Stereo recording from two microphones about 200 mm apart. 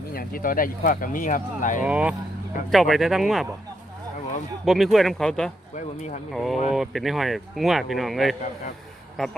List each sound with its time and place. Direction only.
0.1 s speech: 45° left (ahead or behind)
1.8 s speech: 5° right (ahead or behind)
4.6 s speech: centre (ahead or behind)